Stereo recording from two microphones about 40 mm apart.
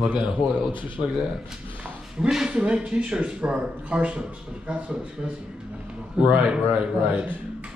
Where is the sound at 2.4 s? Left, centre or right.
Right.